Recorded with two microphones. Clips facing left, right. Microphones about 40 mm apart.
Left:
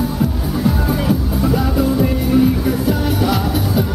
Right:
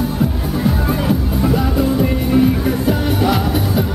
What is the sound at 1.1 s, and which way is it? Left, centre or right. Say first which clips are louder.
Music: right 1 dB; centre.